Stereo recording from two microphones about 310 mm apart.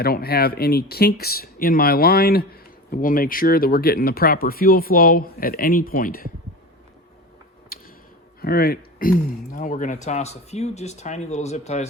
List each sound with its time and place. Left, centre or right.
0.0 s speech: left
7.7 s a sound: left
8.4 s speech: left